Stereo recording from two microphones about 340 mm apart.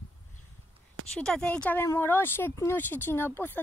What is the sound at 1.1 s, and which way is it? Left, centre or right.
Speech, centre.